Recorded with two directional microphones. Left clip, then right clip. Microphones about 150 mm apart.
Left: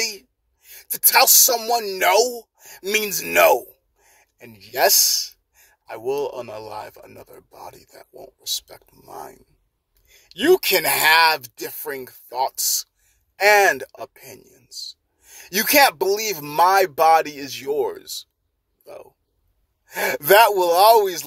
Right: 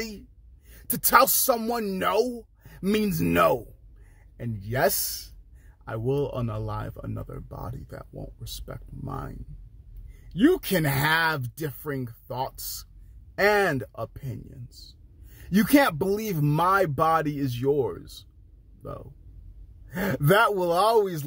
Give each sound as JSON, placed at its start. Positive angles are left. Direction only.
{"t": 0.0, "sound": "a sound", "side_deg": 15}
{"t": 0.7, "sound": "speech", "side_deg": 15}
{"t": 10.2, "sound": "speech", "side_deg": 15}
{"t": 19.9, "sound": "speech", "side_deg": 15}